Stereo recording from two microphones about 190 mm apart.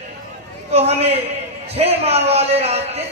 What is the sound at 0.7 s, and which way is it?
A woman's voice, 30° right (ahead or behind).